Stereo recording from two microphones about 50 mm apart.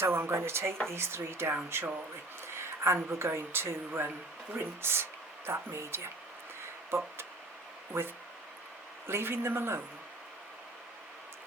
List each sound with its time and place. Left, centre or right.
0.0 s speech: right
2.6 s speech: right
7.9 s speech: right